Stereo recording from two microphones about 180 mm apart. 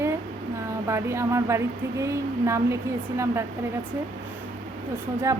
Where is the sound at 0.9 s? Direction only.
15° right (ahead or behind).